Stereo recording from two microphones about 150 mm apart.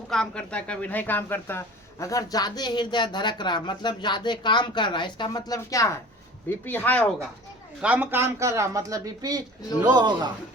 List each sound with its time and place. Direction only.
0.1 s speech: 5° left (ahead or behind)
7.8 s a woman's voice: 10° right (ahead or behind); by 10.3 s 30° right (ahead or behind)